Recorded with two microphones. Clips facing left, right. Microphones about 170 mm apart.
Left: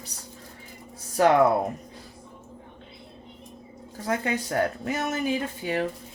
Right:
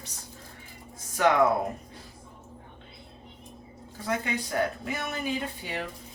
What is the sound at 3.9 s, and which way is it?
Speech, 40° left (ahead or behind).